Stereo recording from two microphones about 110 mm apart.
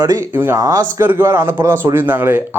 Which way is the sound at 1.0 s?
20° right (ahead or behind).